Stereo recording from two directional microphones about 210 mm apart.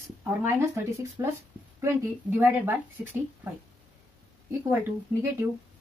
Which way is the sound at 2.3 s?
10° right (ahead or behind).